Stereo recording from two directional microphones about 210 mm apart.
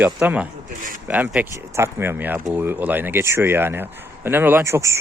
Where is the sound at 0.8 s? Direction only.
40° right (ahead or behind).